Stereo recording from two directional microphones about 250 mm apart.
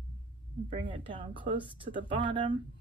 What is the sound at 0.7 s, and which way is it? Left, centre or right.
Speech, centre.